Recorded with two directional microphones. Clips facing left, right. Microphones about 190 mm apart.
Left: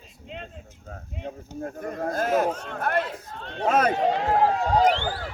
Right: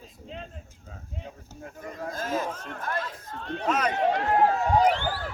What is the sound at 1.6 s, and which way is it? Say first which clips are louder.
A man's voice: left 7 dB; 55° left (ahead or behind).